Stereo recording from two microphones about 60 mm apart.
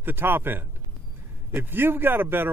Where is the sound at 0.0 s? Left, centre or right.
Right.